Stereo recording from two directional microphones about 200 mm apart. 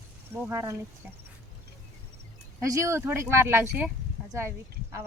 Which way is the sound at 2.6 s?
15° right (ahead or behind).